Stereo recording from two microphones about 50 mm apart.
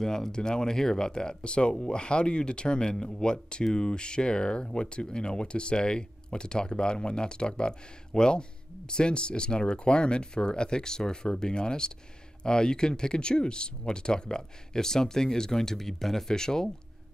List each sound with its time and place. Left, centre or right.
0.0 s speech: centre